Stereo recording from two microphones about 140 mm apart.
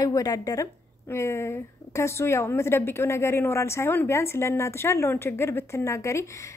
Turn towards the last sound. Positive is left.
turn(degrees=20)  # may be behind; listen again after turning